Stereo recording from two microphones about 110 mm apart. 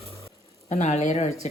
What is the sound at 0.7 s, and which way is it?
Speech, 90° left.